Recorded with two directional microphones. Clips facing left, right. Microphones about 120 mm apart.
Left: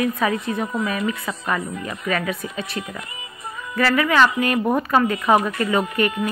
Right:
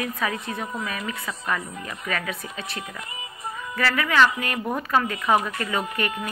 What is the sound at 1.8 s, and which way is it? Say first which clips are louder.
Speech: left 6 dB; 10° left (ahead or behind).